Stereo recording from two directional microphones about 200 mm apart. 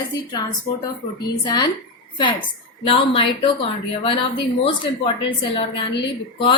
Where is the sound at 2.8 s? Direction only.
25° left (ahead or behind).